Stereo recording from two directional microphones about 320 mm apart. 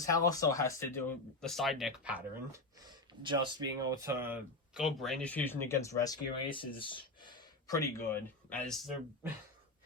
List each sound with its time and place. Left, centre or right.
0.1 s speech: centre
9.2 s speech: centre